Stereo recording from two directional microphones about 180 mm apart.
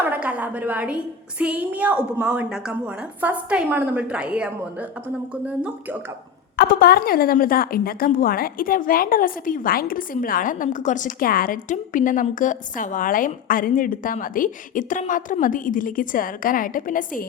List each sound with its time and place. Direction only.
0.0 s a sound: 10° right (ahead or behind)
1.4 s a woman's voice: 10° right (ahead or behind)
6.6 s a woman's voice: 55° left (ahead or behind)